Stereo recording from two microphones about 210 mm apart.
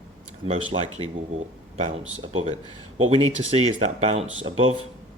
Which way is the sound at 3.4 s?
30° right (ahead or behind).